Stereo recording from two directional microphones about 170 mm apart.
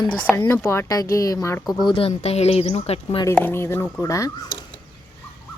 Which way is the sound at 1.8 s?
35° left (ahead or behind).